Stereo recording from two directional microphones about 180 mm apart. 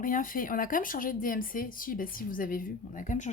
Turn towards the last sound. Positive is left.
turn(degrees=45)  # may be behind; listen again after turning